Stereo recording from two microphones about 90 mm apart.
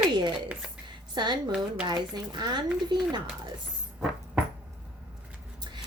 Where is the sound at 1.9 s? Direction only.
50° right (ahead or behind).